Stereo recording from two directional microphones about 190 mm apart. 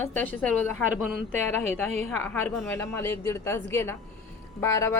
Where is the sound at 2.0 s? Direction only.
10° left (ahead or behind).